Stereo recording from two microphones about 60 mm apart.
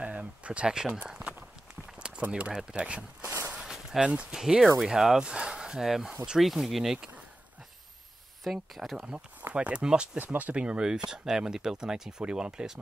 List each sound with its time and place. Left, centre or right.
0.0 s a sound: right
1.0 s walk: centre
2.0 s speech: centre
3.6 s a sound: centre
4.1 s speech: centre
4.4 s speech: centre
8.5 s speech: centre
9.5 s speech: centre